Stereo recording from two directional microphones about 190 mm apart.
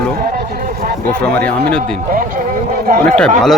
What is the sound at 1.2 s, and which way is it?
Speech, 10° left (ahead or behind).